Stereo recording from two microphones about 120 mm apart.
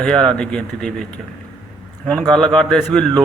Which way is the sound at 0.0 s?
5° left (ahead or behind).